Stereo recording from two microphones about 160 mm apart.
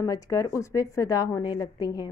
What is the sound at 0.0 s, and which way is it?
A woman's voice, 20° left (ahead or behind).